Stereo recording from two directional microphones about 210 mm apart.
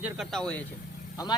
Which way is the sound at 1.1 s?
20° left (ahead or behind).